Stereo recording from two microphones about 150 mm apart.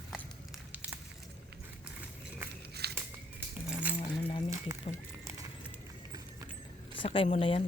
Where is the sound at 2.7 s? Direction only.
90° right.